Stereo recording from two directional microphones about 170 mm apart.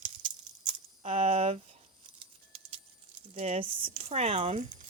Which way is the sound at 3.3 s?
35° right (ahead or behind).